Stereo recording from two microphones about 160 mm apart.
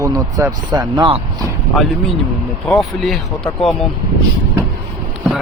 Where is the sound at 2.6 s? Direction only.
Centre (ahead or behind).